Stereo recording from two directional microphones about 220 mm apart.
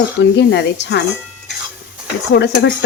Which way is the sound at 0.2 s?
50° left (ahead or behind).